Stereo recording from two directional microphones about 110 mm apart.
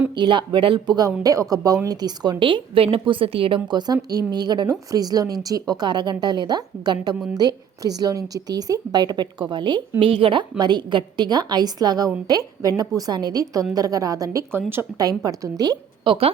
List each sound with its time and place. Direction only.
0.1 s speech: 45° right (ahead or behind)
1.2 s speech: 35° right (ahead or behind)
10.0 s speech: 55° right (ahead or behind)
10.6 s speech: 45° right (ahead or behind)
16.0 s speech: 60° right (ahead or behind)